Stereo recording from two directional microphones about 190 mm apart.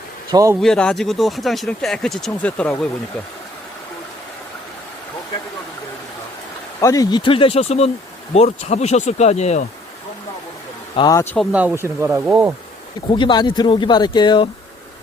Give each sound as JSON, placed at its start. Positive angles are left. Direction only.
{"t": 0.3, "sound": "speech", "side_deg": -20}
{"t": 0.6, "sound": "speech", "side_deg": 5}
{"t": 6.7, "sound": "speech", "side_deg": 15}
{"t": 10.9, "sound": "speech", "side_deg": 20}
{"t": 11.3, "sound": "speech", "side_deg": -10}
{"t": 13.1, "sound": "speech", "side_deg": 25}